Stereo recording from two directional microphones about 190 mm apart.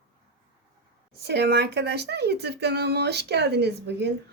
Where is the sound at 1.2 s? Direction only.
60° right (ahead or behind).